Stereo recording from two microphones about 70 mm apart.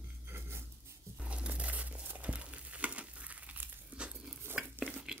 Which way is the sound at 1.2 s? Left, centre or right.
Centre.